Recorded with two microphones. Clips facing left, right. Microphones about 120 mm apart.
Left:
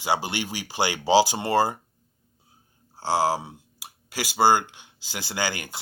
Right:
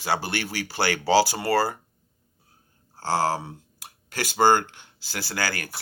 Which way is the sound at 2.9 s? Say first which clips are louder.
Left 1 dB; 15° left (ahead or behind).